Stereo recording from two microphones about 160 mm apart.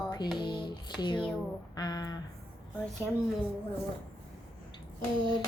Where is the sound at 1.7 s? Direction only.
25° left (ahead or behind).